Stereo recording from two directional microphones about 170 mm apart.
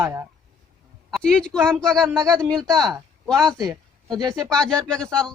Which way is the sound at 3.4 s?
20° right (ahead or behind).